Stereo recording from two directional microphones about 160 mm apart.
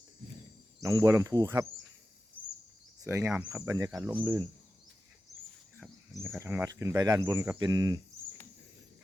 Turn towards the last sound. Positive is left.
turn(degrees=-20)  # may be behind; listen again after turning